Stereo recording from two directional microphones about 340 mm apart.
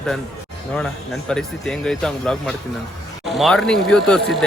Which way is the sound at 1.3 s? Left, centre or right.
Centre.